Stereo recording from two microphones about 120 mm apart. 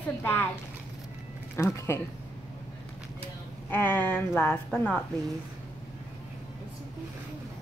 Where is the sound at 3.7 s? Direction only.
15° left (ahead or behind).